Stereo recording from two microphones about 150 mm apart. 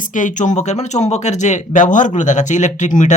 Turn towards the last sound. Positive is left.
turn(degrees=55)  # may be behind; listen again after turning